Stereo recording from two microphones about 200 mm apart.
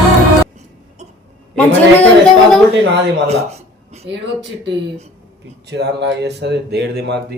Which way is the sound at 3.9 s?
30° right (ahead or behind).